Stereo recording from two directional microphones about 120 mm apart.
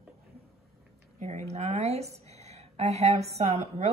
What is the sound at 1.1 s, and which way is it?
A woman's voice, 75° right (ahead or behind).